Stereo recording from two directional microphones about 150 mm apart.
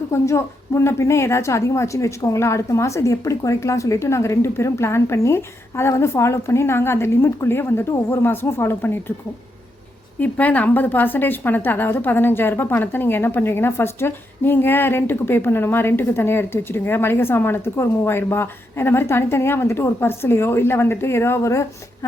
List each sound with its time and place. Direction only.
0.1 s a woman's voice: 20° left (ahead or behind)
10.2 s a woman's voice: 10° left (ahead or behind)